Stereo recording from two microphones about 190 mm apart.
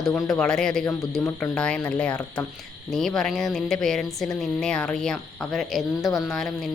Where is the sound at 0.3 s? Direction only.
5° left (ahead or behind).